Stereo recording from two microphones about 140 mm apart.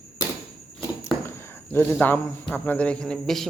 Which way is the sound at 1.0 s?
20° left (ahead or behind).